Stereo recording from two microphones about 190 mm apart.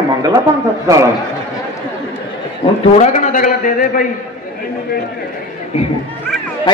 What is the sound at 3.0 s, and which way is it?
A man's voice, 40° left (ahead or behind).